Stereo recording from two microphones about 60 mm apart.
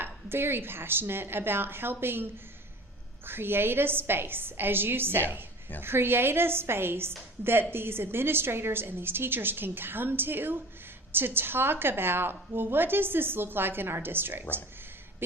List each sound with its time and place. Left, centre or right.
0.0 s a woman's voice: right